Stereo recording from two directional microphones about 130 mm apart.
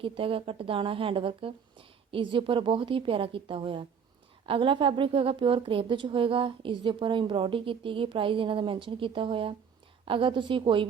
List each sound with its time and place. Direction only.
0.0 s a woman's voice: 45° right (ahead or behind)